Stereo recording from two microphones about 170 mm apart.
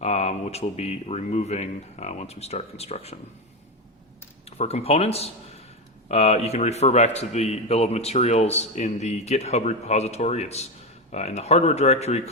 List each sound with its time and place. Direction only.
0.0 s a man's voice: 40° left (ahead or behind)
4.4 s a man's voice: 35° left (ahead or behind)